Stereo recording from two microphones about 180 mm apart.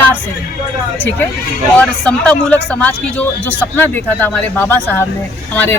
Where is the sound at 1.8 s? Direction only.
5° left (ahead or behind).